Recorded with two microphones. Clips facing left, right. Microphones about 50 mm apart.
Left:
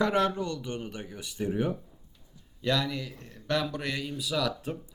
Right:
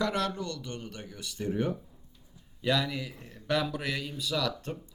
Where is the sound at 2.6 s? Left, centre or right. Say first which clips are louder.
Even; centre.